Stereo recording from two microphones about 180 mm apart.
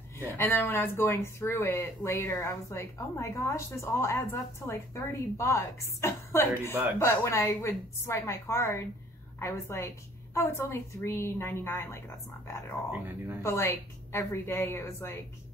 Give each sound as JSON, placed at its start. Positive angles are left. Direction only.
{"t": 0.4, "sound": "speech", "side_deg": 10}
{"t": 12.9, "sound": "speech", "side_deg": -10}
{"t": 13.4, "sound": "speech", "side_deg": 15}